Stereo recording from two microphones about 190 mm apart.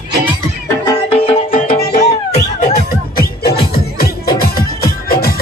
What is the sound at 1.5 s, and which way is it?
Music, 45° left (ahead or behind).